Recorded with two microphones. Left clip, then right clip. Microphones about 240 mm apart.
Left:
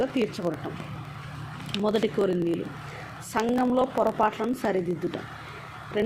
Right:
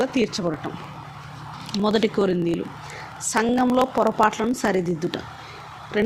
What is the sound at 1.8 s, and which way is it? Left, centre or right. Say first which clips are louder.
A woman's voice: right 4 dB; right.